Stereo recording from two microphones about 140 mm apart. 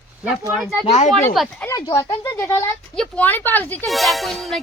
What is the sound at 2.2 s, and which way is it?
Speech, 20° left (ahead or behind).